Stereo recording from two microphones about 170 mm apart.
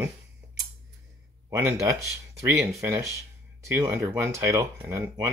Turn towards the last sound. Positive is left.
turn(degrees=-15)  # may be behind; listen again after turning